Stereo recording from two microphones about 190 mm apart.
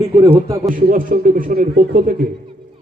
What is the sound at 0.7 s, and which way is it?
A man's voice, 45° right (ahead or behind).